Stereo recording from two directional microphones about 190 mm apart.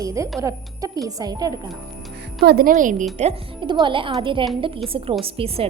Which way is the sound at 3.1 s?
30° right (ahead or behind).